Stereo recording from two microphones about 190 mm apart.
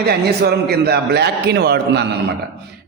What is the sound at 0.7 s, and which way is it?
A man's voice, 60° right (ahead or behind).